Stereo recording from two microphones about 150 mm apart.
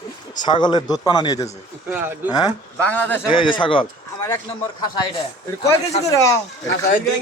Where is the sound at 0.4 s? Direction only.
30° left (ahead or behind).